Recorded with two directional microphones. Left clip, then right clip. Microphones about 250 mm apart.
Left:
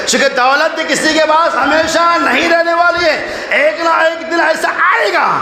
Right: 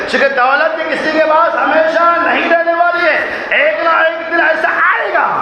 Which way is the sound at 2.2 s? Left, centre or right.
Left.